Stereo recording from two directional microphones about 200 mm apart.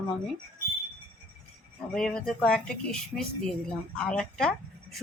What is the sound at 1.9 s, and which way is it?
Speech, 5° left (ahead or behind).